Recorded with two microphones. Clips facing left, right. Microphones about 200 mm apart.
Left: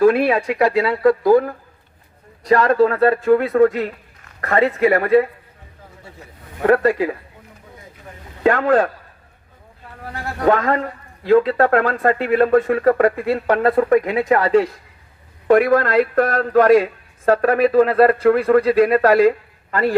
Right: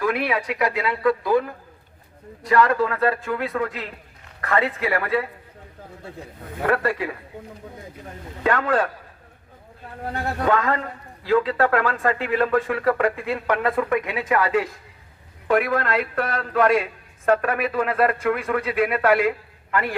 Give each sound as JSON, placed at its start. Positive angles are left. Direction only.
{"t": 0.0, "sound": "speech", "side_deg": 45}
{"t": 2.5, "sound": "a man's voice", "side_deg": 35}
{"t": 6.7, "sound": "a man's voice", "side_deg": 35}
{"t": 8.4, "sound": "a man's voice", "side_deg": 35}
{"t": 10.4, "sound": "a man's voice", "side_deg": 35}